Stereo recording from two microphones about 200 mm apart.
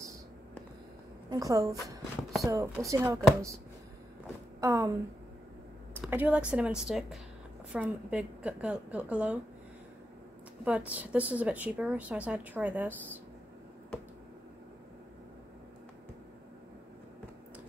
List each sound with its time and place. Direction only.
1.3 s speech: 15° right (ahead or behind)
4.6 s speech: 15° right (ahead or behind)
6.0 s speech: 10° right (ahead or behind)
10.6 s speech: 5° right (ahead or behind)